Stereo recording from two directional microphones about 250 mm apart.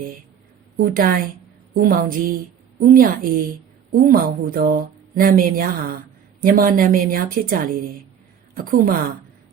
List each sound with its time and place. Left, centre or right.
0.8 s speech: right